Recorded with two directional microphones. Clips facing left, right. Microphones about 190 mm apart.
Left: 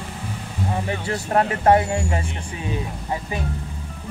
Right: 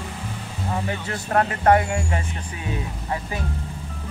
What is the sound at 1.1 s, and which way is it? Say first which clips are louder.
Speech: left 2 dB; 25° left (ahead or behind).